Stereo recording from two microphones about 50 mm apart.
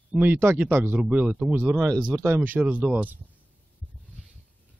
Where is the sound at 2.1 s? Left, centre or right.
Right.